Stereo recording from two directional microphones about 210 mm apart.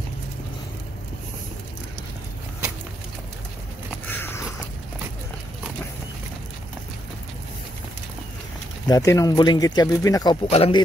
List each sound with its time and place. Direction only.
4.1 s biting: 10° left (ahead or behind)
8.8 s speech: 15° left (ahead or behind)
10.5 s speech: 25° left (ahead or behind)